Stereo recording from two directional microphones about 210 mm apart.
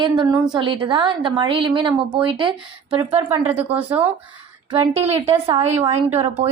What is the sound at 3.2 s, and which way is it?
Speech, 10° right (ahead or behind).